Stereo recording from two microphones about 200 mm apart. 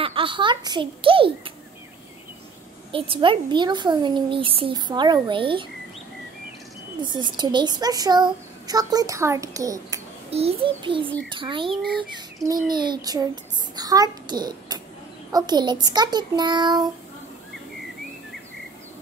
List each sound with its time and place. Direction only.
0.0 s a child's voice: 25° right (ahead or behind)
2.9 s a child's voice: 25° right (ahead or behind)
7.0 s a child's voice: 20° right (ahead or behind)
10.3 s a child's voice: 30° right (ahead or behind)
12.7 s a child's voice: 20° right (ahead or behind)